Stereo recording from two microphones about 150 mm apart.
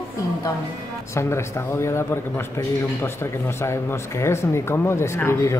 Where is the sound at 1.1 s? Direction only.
20° left (ahead or behind).